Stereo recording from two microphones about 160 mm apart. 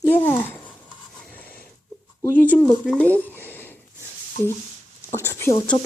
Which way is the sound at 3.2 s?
10° left (ahead or behind).